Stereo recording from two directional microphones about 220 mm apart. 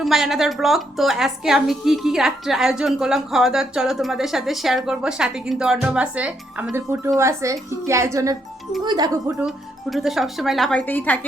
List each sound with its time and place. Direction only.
0.0 s a woman's voice: centre (ahead or behind); by 9.3 s 20° right (ahead or behind)
9.9 s a woman's voice: centre (ahead or behind)